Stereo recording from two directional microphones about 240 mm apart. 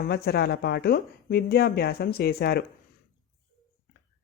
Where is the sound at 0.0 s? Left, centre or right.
Left.